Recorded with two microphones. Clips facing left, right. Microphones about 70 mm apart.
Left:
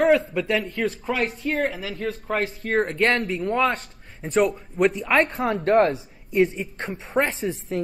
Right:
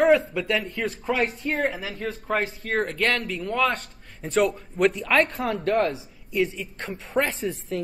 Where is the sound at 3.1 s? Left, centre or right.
Left.